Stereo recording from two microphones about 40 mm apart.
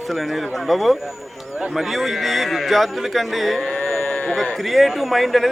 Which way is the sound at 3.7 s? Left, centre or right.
Centre.